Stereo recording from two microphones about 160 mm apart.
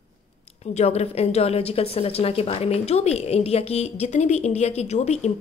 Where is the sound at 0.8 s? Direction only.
40° left (ahead or behind).